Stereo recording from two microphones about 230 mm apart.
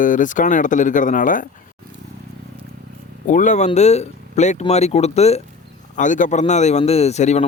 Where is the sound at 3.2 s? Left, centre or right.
Left.